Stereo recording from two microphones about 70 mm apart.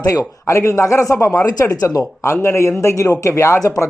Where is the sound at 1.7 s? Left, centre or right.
Left.